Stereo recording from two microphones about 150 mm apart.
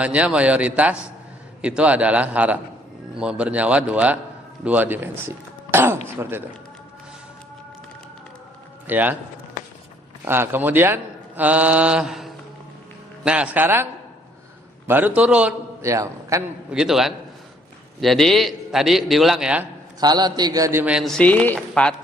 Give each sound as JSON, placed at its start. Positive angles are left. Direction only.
{"t": 0.0, "sound": "a man's voice", "side_deg": -10}
{"t": 5.7, "sound": "throat clearing", "side_deg": -15}
{"t": 8.9, "sound": "a man's voice", "side_deg": -10}
{"t": 10.2, "sound": "a man's voice", "side_deg": -15}
{"t": 14.8, "sound": "a man's voice", "side_deg": -10}
{"t": 15.8, "sound": "a man's voice", "side_deg": -20}
{"t": 16.7, "sound": "a man's voice", "side_deg": -5}
{"t": 20.0, "sound": "a man's voice", "side_deg": -25}
{"t": 20.8, "sound": "speech", "side_deg": 0}